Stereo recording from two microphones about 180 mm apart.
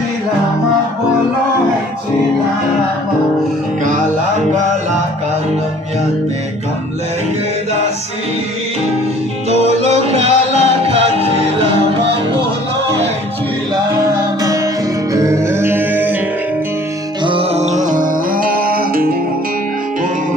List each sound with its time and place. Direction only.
9.5 s music: 35° right (ahead or behind)
15.1 s music: 15° right (ahead or behind)
17.3 s music: 35° right (ahead or behind); by 19.1 s 55° right (ahead or behind)